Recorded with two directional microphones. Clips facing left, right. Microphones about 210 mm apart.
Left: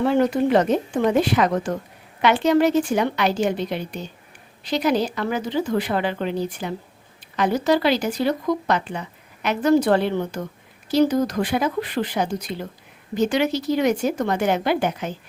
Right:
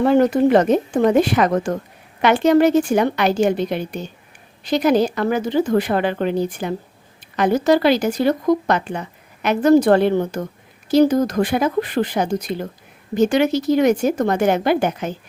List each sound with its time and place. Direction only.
0.0 s speech: 45° right (ahead or behind)